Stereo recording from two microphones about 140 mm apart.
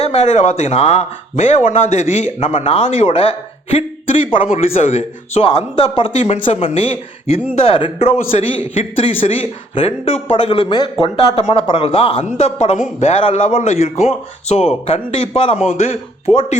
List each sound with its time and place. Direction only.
0.0 s speech: 50° left (ahead or behind)